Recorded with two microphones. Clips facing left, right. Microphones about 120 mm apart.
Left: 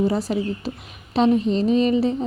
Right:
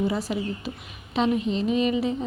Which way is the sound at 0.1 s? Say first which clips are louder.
Left 4 dB; 40° left (ahead or behind).